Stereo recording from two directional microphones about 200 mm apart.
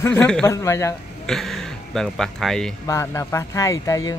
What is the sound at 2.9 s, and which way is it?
Speech, 15° left (ahead or behind).